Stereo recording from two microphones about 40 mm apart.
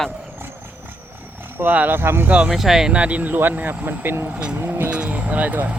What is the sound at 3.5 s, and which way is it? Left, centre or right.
Speech, right.